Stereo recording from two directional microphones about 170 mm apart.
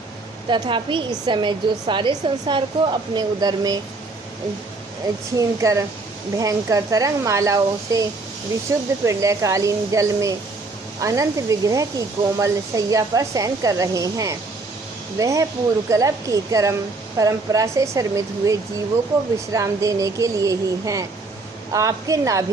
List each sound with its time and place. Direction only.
0.5 s speech: 30° right (ahead or behind)
5.4 s speech: 20° right (ahead or behind)